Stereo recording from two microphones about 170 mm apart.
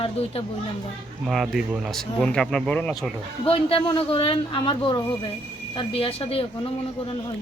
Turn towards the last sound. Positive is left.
turn(degrees=35)  # may be behind; listen again after turning